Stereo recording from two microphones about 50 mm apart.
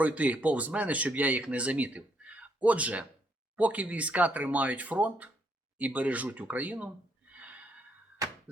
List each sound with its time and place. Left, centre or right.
0.0 s speech: right